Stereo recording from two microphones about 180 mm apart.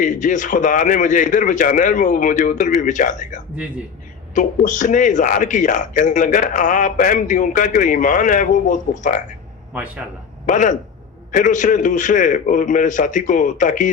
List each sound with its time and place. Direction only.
0.0 s speech: 45° left (ahead or behind)
10.4 s speech: 45° left (ahead or behind)